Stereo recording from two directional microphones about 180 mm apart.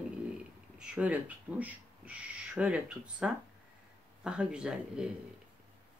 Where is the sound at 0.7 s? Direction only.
5° right (ahead or behind).